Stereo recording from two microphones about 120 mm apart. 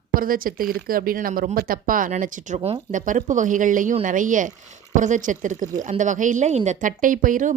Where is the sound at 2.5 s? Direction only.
50° right (ahead or behind).